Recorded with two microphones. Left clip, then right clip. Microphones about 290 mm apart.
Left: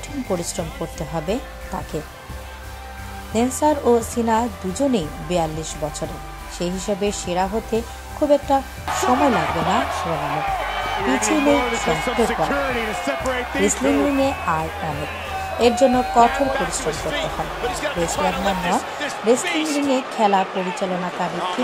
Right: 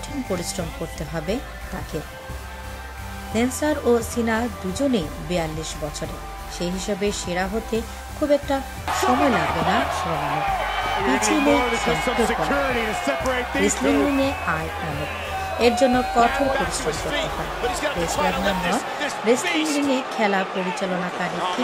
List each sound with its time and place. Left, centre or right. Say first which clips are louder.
1.1 s speech: left 3 dB; centre
3.6 s speech: left 4 dB; centre